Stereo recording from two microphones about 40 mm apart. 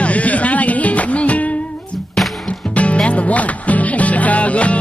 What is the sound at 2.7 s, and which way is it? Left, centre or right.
Speech, left.